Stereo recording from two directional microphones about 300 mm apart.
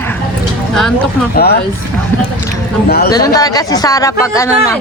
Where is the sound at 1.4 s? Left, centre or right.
Left.